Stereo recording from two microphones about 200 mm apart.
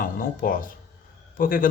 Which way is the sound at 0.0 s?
45° left (ahead or behind).